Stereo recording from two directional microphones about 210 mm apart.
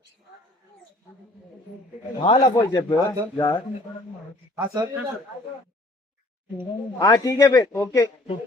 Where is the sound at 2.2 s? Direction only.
25° left (ahead or behind).